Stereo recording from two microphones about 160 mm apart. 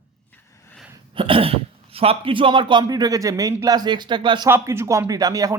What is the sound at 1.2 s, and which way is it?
Speech, 35° right (ahead or behind).